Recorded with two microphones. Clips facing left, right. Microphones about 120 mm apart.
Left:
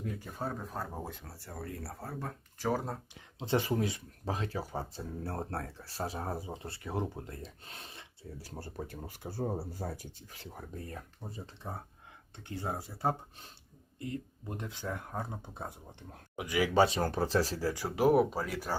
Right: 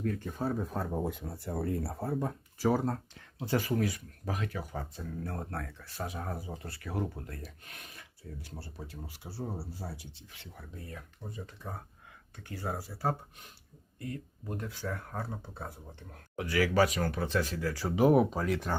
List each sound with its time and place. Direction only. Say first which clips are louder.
0.0 s speech: right 5 dB; 10° left (ahead or behind)
1.3 s speech: right 9 dB; 25° right (ahead or behind)
2.6 s speech: right 4 dB; 5° right (ahead or behind)
3.2 s speech: left 4 dB; 20° left (ahead or behind)
17.7 s speech: right 2 dB; 5° left (ahead or behind)